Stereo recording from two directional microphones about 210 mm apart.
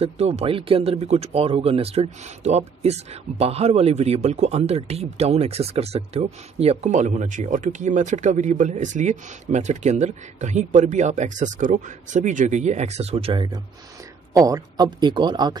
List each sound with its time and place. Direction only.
0.0 s a man's voice: 30° right (ahead or behind)